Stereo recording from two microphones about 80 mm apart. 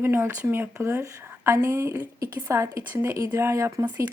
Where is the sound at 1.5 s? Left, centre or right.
Right.